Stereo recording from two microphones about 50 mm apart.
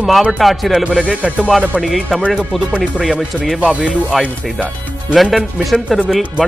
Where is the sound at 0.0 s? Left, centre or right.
Centre.